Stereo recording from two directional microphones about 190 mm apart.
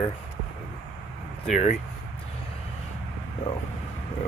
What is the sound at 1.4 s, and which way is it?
Speech, 40° left (ahead or behind).